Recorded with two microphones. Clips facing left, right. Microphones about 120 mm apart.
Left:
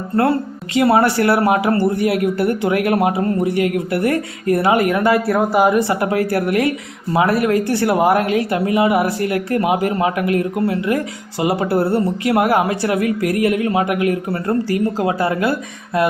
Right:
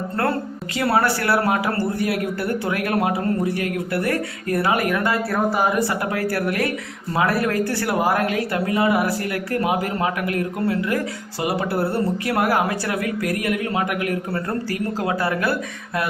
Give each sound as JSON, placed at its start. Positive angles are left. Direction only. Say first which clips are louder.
{"t": 0.8, "sound": "a man's voice", "louder": "left 6 dB", "side_deg": 20}